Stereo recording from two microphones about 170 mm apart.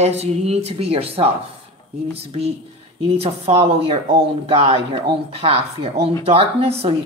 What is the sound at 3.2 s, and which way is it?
Speech, 35° right (ahead or behind).